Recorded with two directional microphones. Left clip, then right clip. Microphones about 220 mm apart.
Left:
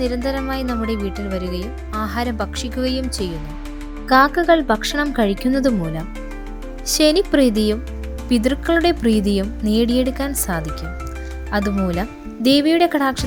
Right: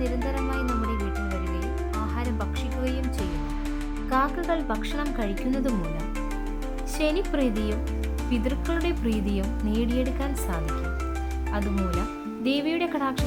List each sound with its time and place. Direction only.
0.0 s speech: 25° left (ahead or behind)
4.1 s speech: 30° left (ahead or behind)
6.8 s speech: 25° left (ahead or behind)